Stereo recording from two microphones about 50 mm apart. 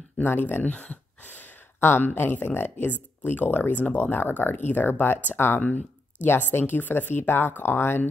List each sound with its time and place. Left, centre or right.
0.2 s speech: left
1.2 s a sound: left
1.8 s speech: left
2.9 s speech: left
3.7 s speech: left
4.0 s speech: left
5.6 s speech: left
6.2 s speech: left